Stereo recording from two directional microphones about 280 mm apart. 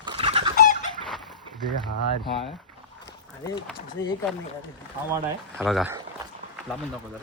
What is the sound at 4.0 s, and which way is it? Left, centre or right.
Speech, centre.